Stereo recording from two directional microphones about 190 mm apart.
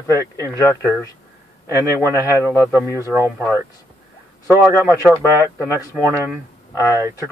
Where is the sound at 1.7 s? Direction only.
15° right (ahead or behind).